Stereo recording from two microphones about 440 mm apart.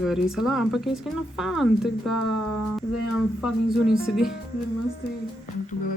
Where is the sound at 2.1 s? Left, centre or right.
Left.